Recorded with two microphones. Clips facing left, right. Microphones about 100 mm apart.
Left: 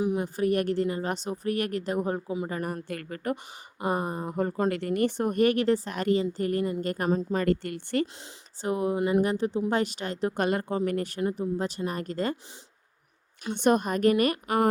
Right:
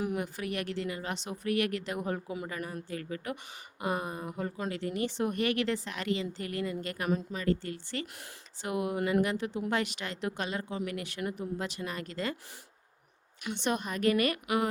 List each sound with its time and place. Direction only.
0.0 s a sound: 20° left (ahead or behind)
0.3 s a woman's voice: 40° left (ahead or behind); by 2.5 s 25° left (ahead or behind)
2.8 s speech: 60° left (ahead or behind)
3.8 s a woman's voice: 35° left (ahead or behind)
4.7 s a woman's voice: 55° left (ahead or behind); by 7.4 s 35° left (ahead or behind)
7.4 s speech: 60° left (ahead or behind)
8.6 s a woman's voice: 35° left (ahead or behind)
9.0 s speech: 20° left (ahead or behind)
9.2 s a woman's voice: 35° left (ahead or behind)
10.4 s speech: 50° left (ahead or behind)
11.2 s a woman's voice: 30° left (ahead or behind)
13.5 s speech: 50° left (ahead or behind)